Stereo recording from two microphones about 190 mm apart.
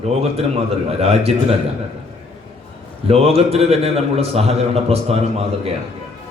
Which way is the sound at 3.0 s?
30° right (ahead or behind).